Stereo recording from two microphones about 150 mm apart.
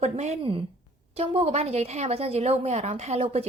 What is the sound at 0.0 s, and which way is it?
A woman's voice, 50° right (ahead or behind).